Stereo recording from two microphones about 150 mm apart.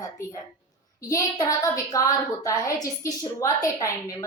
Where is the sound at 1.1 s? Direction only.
25° left (ahead or behind).